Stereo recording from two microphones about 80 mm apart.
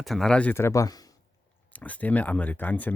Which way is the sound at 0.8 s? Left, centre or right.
Left.